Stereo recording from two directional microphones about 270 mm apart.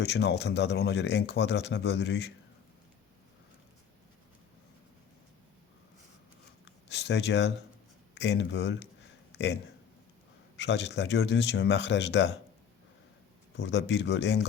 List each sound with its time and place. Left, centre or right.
0.0 s speech: left
6.9 s speech: left
9.3 s a sound: left
10.6 s speech: left
13.6 s speech: left